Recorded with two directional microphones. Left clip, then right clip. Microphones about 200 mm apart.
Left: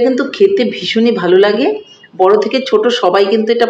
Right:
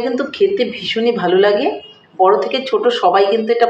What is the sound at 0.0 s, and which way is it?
Speech, 45° left (ahead or behind).